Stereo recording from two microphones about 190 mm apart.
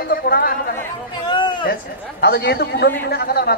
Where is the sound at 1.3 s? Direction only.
25° left (ahead or behind).